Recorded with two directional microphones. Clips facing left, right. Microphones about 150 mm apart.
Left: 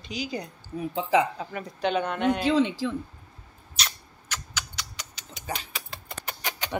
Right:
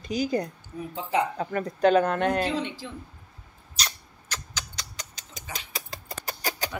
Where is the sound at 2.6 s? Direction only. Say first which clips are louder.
Left 9 dB; 90° left.